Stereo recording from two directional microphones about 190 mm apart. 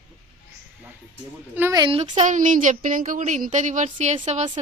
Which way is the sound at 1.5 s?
15° right (ahead or behind).